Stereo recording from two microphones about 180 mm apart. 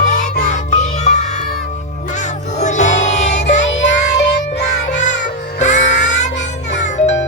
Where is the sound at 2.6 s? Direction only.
40° left (ahead or behind).